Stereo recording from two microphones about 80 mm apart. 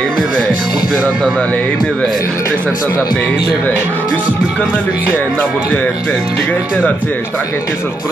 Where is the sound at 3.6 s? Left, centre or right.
Centre.